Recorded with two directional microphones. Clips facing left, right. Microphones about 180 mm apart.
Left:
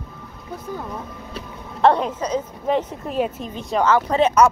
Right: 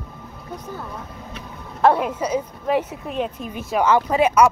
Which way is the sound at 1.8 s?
5° right (ahead or behind).